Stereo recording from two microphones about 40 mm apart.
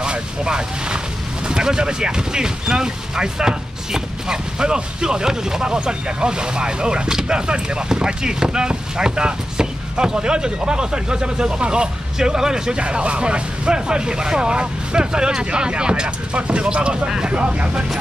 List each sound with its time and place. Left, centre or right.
0.0 s speech: right
12.7 s speech: right